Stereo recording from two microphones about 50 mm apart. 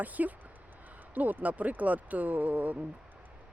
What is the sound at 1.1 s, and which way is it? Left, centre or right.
Speech, right.